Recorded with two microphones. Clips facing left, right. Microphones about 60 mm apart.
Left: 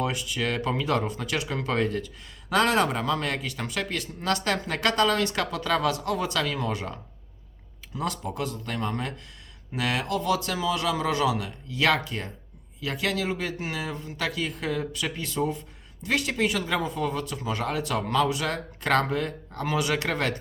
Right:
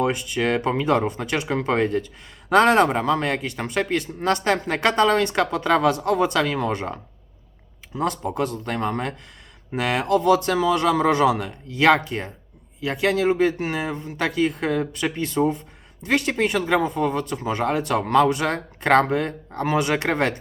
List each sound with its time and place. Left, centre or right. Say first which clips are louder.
0.0 s speech: right 6 dB; right
6.6 s speech: right 5 dB; right
7.9 s speech: right 6 dB; right